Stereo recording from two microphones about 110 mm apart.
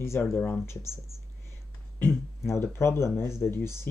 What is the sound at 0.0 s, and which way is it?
Speech, 25° left (ahead or behind).